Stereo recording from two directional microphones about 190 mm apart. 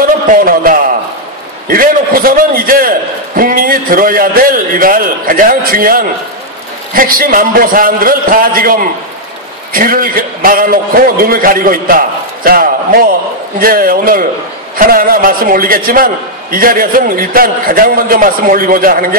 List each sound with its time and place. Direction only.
0.3 s a man's voice: 50° right (ahead or behind)